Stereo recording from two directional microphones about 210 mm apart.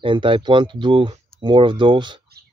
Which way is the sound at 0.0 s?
25° right (ahead or behind).